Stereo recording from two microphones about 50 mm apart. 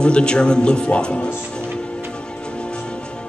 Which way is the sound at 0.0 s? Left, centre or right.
Centre.